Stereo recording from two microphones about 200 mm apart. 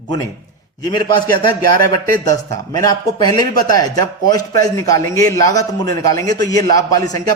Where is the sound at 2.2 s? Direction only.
15° left (ahead or behind).